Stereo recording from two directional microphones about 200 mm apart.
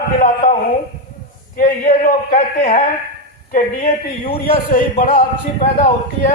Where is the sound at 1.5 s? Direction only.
40° left (ahead or behind).